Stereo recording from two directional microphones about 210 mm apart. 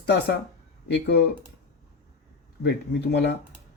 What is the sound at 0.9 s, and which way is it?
Speech, 55° left (ahead or behind).